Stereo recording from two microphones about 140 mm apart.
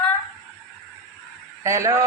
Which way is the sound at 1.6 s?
25° right (ahead or behind).